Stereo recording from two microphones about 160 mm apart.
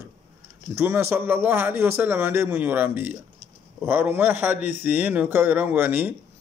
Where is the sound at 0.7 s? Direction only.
15° right (ahead or behind).